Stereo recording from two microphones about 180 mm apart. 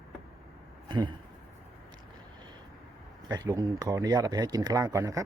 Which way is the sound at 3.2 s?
20° right (ahead or behind).